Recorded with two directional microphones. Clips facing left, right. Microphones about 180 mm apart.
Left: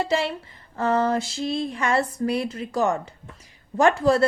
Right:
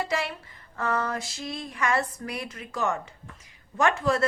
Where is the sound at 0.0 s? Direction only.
25° left (ahead or behind).